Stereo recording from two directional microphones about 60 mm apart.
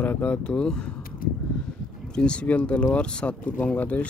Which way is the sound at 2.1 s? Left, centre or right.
Centre.